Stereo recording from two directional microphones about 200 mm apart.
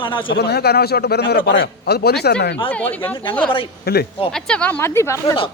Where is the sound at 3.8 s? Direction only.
50° left (ahead or behind).